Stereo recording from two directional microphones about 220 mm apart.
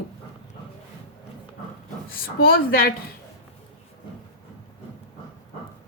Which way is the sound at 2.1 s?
40° left (ahead or behind).